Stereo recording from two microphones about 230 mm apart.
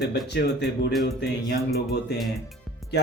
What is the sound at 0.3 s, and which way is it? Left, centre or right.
Speech, left.